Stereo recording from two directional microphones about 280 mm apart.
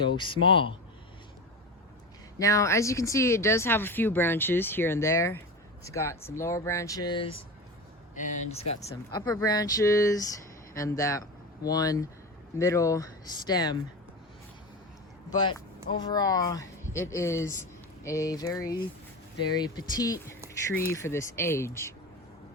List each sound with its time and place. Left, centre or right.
0.0 s speech: centre
2.4 s speech: centre; by 8.6 s left
9.1 s speech: centre
15.3 s speech: centre